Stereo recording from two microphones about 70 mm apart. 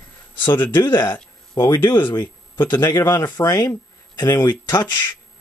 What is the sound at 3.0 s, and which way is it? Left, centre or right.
Speech, left.